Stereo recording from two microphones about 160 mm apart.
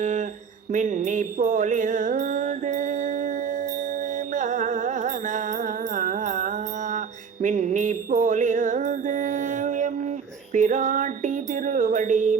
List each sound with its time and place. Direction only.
0.0 s speech: 50° right (ahead or behind)
0.7 s mantra: 50° right (ahead or behind)
4.4 s music: 50° right (ahead or behind)
7.4 s mantra: 50° right (ahead or behind)
10.5 s music: 55° right (ahead or behind)